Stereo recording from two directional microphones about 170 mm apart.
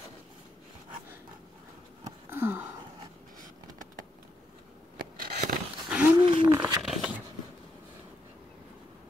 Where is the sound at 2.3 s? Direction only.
10° right (ahead or behind).